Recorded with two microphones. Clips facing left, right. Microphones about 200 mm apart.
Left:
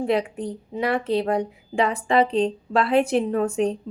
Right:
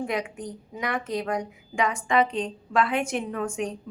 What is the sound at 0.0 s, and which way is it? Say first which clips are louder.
A woman's voice: left 6 dB; 30° left (ahead or behind).